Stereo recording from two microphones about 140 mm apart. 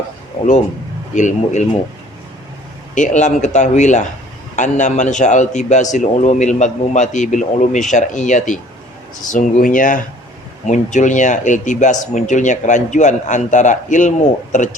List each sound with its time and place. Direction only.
1.1 s speech: 60° left (ahead or behind)
2.9 s speech: 60° left (ahead or behind)
9.3 s speech: 75° left (ahead or behind)
10.7 s speech: 60° left (ahead or behind)